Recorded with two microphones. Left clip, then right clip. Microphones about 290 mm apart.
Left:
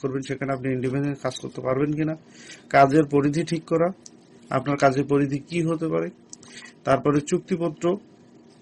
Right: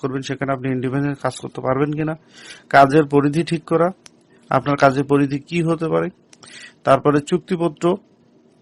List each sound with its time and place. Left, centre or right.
0.0 s a man's voice: right